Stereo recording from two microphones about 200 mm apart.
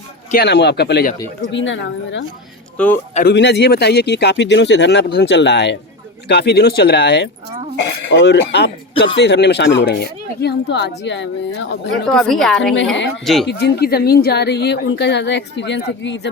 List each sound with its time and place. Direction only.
0.3 s a woman's voice: 55° left (ahead or behind)
1.5 s a woman's voice: 70° left (ahead or behind)
2.7 s speech: 5° left (ahead or behind)
3.2 s a woman's voice: 60° left (ahead or behind)
12.0 s a woman's voice: centre (ahead or behind)
13.5 s a woman's voice: 55° left (ahead or behind)